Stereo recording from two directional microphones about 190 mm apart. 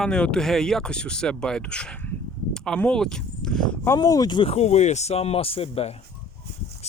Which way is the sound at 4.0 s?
20° left (ahead or behind).